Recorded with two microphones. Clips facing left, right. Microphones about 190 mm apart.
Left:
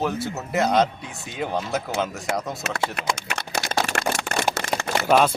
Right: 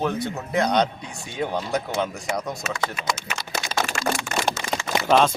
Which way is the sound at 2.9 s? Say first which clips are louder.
Left 1 dB; 65° left (ahead or behind).